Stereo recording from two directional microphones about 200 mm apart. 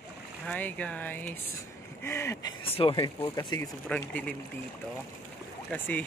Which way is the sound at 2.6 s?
25° left (ahead or behind).